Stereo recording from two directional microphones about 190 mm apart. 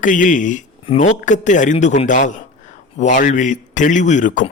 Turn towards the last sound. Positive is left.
turn(degrees=40)  # may be behind; listen again after turning